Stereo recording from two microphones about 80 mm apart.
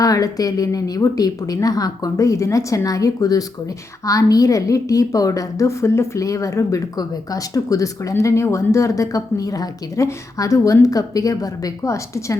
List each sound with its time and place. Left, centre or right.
0.0 s a woman's voice: left